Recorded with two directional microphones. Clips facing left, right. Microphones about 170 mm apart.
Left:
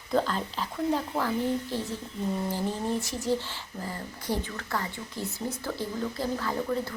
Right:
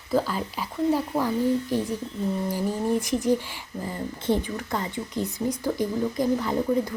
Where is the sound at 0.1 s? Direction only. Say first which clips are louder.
Right 2 dB; 5° right (ahead or behind).